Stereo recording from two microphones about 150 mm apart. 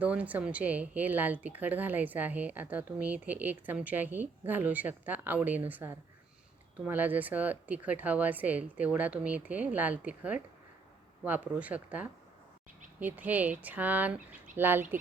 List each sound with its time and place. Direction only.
0.0 s speech: 10° right (ahead or behind)